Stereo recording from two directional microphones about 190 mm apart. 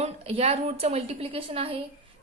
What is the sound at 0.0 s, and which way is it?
A woman's voice, 35° right (ahead or behind).